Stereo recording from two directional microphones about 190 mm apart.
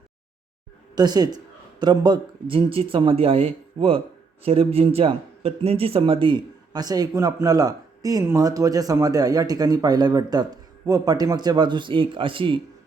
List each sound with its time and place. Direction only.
0.9 s speech: 20° right (ahead or behind)